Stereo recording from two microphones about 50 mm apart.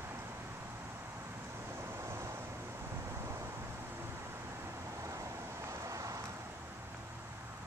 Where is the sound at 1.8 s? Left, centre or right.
Right.